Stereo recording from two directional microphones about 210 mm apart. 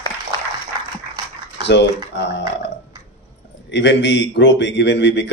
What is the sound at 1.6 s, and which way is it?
Speech, 55° left (ahead or behind).